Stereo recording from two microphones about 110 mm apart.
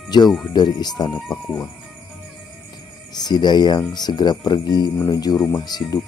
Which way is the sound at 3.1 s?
40° left (ahead or behind).